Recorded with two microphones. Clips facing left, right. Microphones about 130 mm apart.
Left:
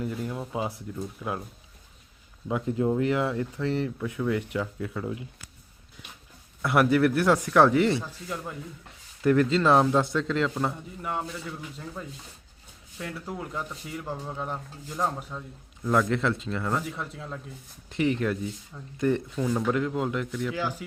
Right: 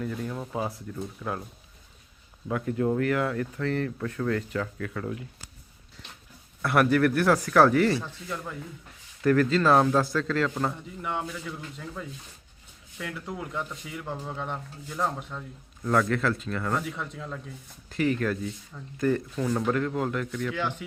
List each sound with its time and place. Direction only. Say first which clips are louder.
0.0 s speech: left 1 dB; 20° left (ahead or behind)
2.5 s speech: left 1 dB; 20° left (ahead or behind)
6.7 s speech: even; 20° left (ahead or behind)
8.0 s speech: even; 10° left (ahead or behind)
10.7 s speech: even; 5° left (ahead or behind); by 16.7 s 20° left (ahead or behind)
17.2 s speech: right 1 dB; 5° left (ahead or behind)
17.8 s speech: even; 20° left (ahead or behind)
19.4 s speech: even; 5° left (ahead or behind)